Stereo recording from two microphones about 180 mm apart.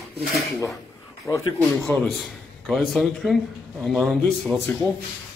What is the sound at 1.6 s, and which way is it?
A man's voice, centre (ahead or behind).